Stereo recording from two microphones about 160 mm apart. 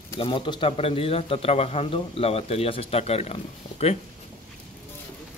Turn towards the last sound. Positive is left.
turn(degrees=40)  # may be behind; listen again after turning